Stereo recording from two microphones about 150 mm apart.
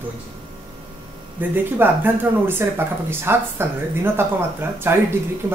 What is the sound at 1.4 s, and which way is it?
Speech, 15° right (ahead or behind).